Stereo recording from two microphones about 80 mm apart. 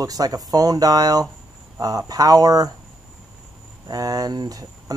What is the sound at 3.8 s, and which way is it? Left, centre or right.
Speech, right.